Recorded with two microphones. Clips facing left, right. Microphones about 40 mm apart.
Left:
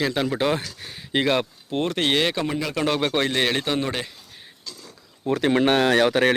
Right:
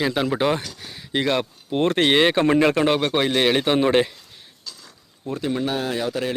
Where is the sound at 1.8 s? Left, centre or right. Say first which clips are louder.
Right 5 dB; right.